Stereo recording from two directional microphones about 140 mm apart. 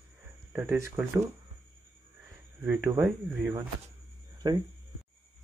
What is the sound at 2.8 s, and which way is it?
Speech, 20° right (ahead or behind).